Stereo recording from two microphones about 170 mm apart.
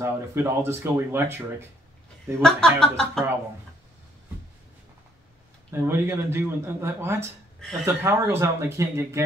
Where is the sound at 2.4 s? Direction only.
5° left (ahead or behind).